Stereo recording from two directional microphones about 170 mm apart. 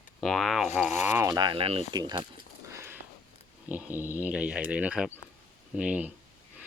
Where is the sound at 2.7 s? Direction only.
15° right (ahead or behind).